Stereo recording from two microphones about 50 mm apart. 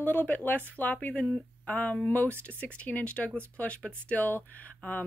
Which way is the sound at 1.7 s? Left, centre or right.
Left.